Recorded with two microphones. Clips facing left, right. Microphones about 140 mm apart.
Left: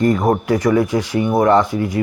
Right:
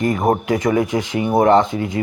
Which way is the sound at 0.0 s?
20° right (ahead or behind).